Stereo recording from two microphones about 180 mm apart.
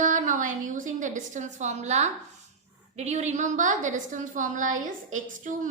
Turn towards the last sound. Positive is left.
turn(degrees=-45)  # may be behind; listen again after turning